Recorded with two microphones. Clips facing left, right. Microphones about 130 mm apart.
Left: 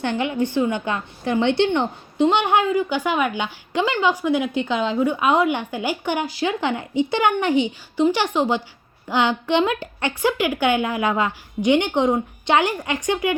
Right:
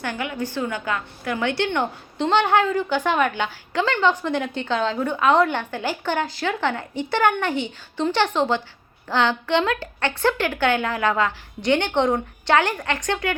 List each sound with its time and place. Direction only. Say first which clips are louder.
0.0 s a woman's voice: left 5 dB; 25° left (ahead or behind)